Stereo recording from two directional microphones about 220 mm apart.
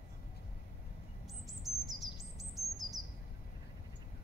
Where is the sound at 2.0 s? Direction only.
Centre (ahead or behind).